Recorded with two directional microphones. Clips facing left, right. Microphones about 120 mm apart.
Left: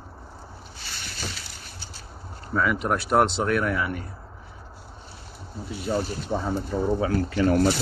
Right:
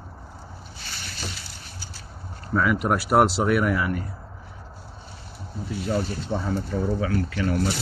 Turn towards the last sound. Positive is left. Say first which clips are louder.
# left 4 dB
turn(degrees=35)  # may be behind; listen again after turning